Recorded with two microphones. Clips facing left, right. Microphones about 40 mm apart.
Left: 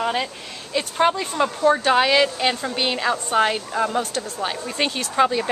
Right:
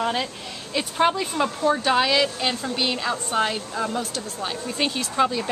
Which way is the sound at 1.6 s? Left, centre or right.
Centre.